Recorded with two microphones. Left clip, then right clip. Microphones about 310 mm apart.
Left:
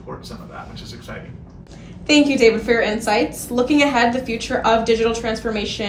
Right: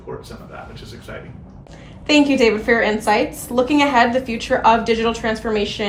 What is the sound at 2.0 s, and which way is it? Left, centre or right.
A woman's voice, right.